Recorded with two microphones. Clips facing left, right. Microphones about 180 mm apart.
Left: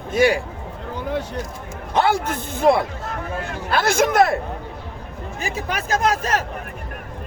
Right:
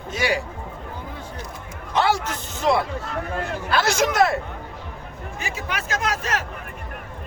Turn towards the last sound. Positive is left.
turn(degrees=40)  # may be behind; listen again after turning